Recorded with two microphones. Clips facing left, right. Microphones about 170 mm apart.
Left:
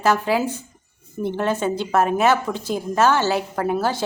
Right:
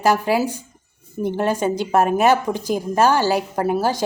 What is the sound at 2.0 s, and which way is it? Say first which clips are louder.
Speech: right 1 dB; 40° right (ahead or behind).